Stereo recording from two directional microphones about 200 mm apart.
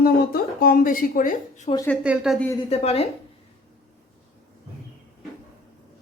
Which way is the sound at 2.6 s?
30° left (ahead or behind).